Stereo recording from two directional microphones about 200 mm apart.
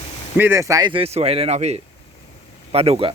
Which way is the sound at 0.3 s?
10° right (ahead or behind).